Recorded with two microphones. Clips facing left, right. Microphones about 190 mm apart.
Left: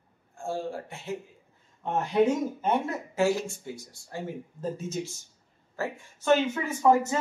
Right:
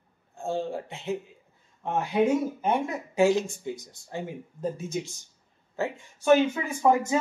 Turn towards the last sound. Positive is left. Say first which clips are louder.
# left 1 dB
turn(degrees=-15)  # may be behind; listen again after turning